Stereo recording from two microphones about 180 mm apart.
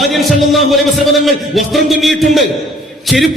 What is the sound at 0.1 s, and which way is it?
A man's voice, centre (ahead or behind).